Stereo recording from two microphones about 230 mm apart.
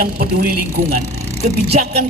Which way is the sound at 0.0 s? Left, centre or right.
Right.